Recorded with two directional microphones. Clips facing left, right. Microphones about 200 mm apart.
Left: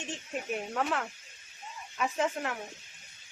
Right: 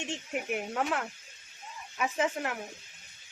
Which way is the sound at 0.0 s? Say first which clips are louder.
Right 2 dB; 20° right (ahead or behind).